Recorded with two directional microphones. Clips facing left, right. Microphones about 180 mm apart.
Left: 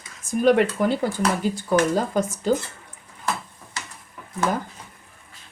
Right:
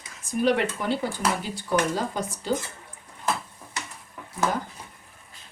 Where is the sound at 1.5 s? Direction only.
50° left (ahead or behind).